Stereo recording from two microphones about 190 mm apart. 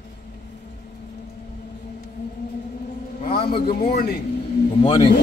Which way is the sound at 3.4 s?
55° left (ahead or behind).